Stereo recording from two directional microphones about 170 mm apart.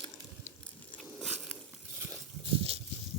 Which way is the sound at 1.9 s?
15° right (ahead or behind).